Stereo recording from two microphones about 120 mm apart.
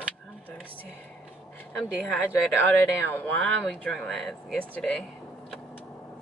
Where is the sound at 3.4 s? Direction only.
5° left (ahead or behind).